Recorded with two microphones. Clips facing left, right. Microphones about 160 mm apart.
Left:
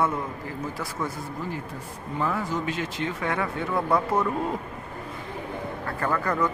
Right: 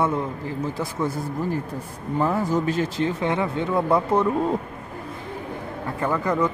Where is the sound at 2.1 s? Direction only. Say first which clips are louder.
Right 6 dB; 35° right (ahead or behind).